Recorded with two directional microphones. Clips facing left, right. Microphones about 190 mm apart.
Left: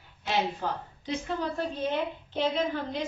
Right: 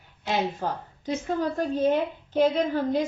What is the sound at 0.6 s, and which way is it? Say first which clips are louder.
A woman's voice: right 3 dB; 45° right (ahead or behind).